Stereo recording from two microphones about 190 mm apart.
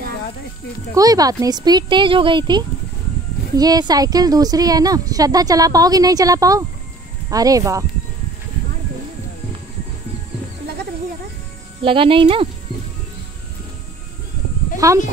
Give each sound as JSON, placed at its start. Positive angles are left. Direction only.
{"t": 0.9, "sound": "a woman's voice", "side_deg": -20}
{"t": 11.8, "sound": "a woman's voice", "side_deg": -25}
{"t": 14.8, "sound": "speech", "side_deg": -15}